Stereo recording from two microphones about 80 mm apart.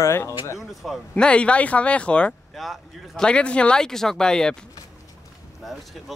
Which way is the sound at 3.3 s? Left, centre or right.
Centre.